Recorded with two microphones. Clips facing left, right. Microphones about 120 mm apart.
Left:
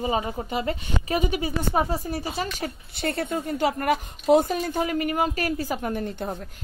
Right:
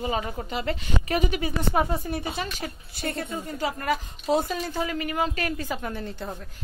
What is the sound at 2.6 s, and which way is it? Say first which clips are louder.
Speech: left 3 dB; 60° left (ahead or behind).